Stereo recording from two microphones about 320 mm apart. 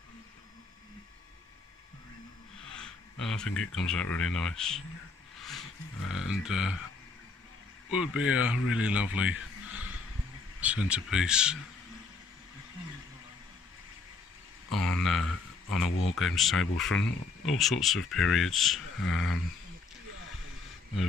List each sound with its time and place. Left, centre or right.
2.7 s speech: centre
6.0 s speech: centre
7.9 s speech: centre
14.7 s speech: centre